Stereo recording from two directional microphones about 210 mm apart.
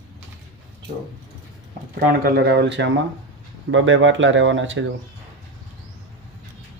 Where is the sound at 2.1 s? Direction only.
50° right (ahead or behind); by 4.8 s 65° right (ahead or behind).